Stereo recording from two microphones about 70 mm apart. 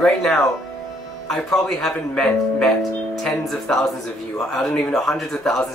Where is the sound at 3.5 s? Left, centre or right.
Centre.